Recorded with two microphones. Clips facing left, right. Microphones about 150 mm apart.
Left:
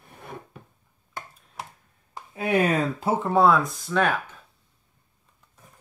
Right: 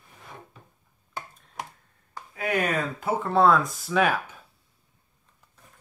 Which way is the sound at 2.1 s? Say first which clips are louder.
Left 4 dB; 25° left (ahead or behind).